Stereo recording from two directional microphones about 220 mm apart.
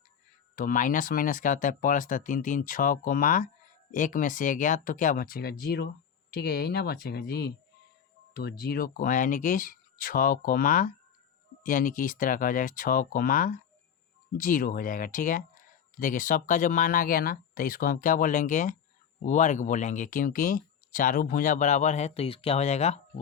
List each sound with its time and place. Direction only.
0.5 s speech: 40° left (ahead or behind)